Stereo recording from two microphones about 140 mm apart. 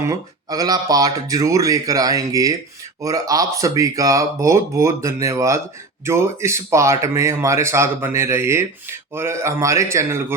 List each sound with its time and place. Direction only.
0.0 s speech: 25° right (ahead or behind)